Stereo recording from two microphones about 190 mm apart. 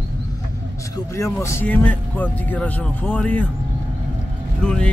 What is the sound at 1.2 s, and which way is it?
Speech, 15° left (ahead or behind).